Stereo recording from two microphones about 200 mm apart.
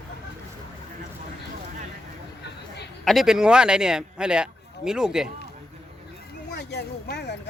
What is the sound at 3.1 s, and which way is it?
Speech, centre (ahead or behind).